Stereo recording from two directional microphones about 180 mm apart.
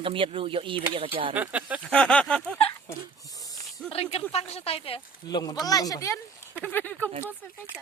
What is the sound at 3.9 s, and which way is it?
Speech, 35° left (ahead or behind).